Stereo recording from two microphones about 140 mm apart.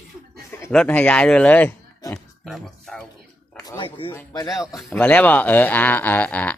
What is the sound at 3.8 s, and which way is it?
Speech, 40° left (ahead or behind).